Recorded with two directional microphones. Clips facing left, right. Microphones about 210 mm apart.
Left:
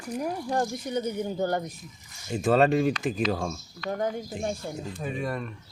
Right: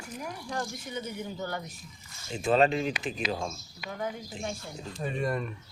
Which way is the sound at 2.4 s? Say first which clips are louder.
Left 3 dB; 45° left (ahead or behind).